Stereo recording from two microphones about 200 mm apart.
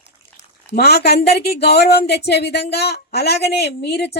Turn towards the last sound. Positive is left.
turn(degrees=55)  # may be behind; listen again after turning